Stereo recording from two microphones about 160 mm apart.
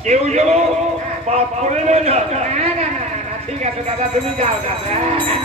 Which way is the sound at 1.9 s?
40° right (ahead or behind).